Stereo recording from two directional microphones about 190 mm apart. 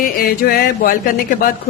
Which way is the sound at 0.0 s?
50° left (ahead or behind).